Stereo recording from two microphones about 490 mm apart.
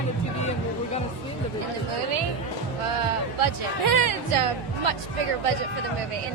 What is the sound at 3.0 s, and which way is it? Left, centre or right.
Music, right.